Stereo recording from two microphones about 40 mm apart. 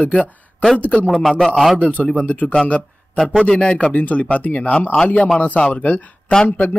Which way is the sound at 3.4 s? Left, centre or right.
Left.